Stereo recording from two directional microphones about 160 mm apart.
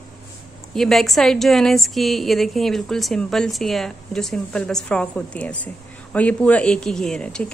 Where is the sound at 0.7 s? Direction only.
Centre (ahead or behind).